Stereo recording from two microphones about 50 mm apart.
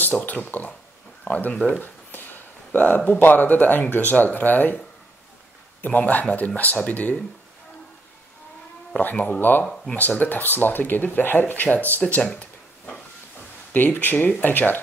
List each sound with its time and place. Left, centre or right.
0.0 s speech: left
2.7 s speech: left
5.8 s speech: left
9.2 s speech: left
12.2 s a sound: left
13.7 s speech: left